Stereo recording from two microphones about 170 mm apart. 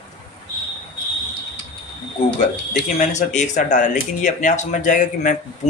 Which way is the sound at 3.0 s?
45° left (ahead or behind).